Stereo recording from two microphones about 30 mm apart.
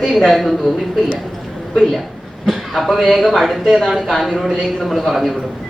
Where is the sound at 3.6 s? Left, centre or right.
Centre.